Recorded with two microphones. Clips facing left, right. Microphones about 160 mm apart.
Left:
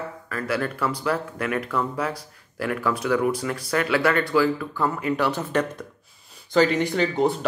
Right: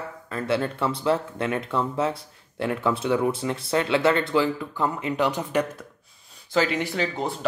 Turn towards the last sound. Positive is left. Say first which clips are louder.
# left 5 dB
turn(degrees=0)  # may be behind; listen again after turning